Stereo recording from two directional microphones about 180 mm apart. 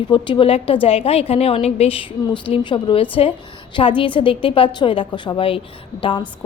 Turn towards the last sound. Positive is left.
turn(degrees=30)  # may be behind; listen again after turning